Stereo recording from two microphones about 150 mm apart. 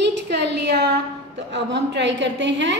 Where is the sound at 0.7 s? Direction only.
90° right.